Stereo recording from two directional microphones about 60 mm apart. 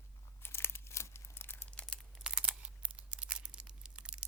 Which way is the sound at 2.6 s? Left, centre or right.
Centre.